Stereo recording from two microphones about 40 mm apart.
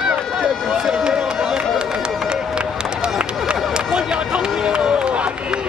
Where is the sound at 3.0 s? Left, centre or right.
Right.